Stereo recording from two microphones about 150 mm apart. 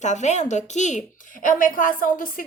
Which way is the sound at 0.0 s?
50° left (ahead or behind).